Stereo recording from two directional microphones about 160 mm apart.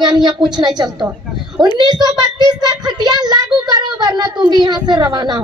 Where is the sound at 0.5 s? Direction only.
25° right (ahead or behind).